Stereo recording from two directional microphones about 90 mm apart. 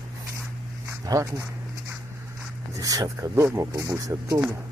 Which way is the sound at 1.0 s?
40° right (ahead or behind).